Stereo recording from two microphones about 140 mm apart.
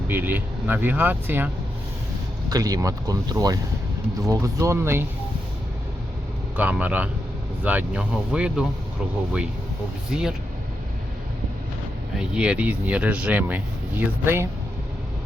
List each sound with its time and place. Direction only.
0.1 s speech: 15° right (ahead or behind)
2.5 s speech: 25° right (ahead or behind)
6.6 s speech: 10° right (ahead or behind)
10.1 s speech: 5° right (ahead or behind)
12.1 s speech: 5° right (ahead or behind)